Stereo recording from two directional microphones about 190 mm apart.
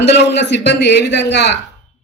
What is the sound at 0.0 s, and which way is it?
A woman's voice, 65° left (ahead or behind).